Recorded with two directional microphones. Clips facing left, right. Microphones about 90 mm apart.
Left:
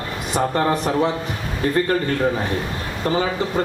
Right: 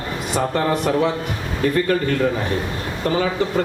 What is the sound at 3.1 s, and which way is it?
Speech, 25° left (ahead or behind).